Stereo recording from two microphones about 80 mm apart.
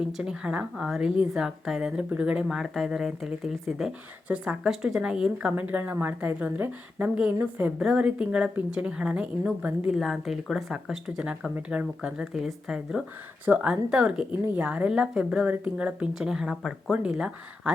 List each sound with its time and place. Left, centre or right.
0.0 s speech: centre
2.6 s speech: centre
5.5 s speech: right
7.8 s speech: centre
9.9 s speech: centre
16.9 s speech: centre